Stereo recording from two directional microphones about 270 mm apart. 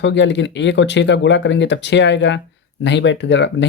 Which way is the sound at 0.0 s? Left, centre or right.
Left.